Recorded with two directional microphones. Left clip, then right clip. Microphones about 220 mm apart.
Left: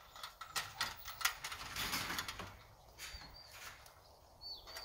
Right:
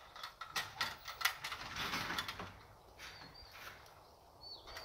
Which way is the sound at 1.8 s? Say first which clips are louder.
Even; 55° left (ahead or behind).